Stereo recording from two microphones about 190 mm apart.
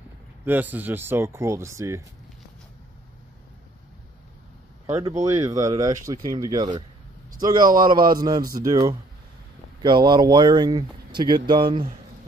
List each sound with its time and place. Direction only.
0.5 s speech: 10° right (ahead or behind)
5.2 s speech: 15° right (ahead or behind)
7.6 s a man's voice: 50° right (ahead or behind)
8.1 s speech: 20° right (ahead or behind)